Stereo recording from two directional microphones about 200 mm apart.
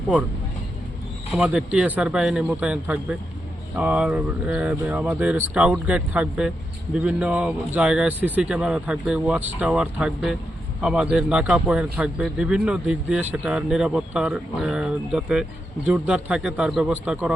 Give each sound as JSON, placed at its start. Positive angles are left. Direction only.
{"t": 1.3, "sound": "a man's voice", "side_deg": -5}